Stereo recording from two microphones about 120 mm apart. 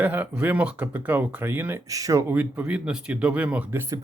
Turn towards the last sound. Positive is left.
turn(degrees=-25)  # may be behind; listen again after turning